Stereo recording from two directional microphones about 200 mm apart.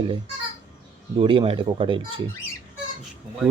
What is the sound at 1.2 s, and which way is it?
Speech, 25° right (ahead or behind).